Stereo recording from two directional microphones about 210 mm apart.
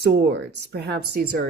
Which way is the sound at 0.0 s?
55° right (ahead or behind).